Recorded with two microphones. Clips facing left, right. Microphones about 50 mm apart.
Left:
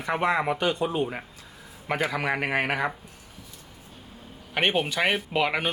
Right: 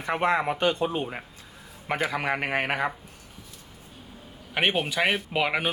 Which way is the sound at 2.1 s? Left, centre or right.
Centre.